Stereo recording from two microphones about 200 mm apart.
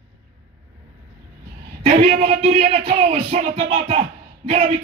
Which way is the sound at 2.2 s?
30° right (ahead or behind).